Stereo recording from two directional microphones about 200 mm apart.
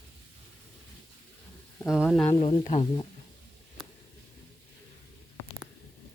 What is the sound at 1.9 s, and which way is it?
Speech, centre (ahead or behind).